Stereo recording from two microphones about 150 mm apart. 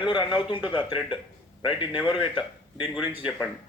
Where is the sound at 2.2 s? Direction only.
35° left (ahead or behind).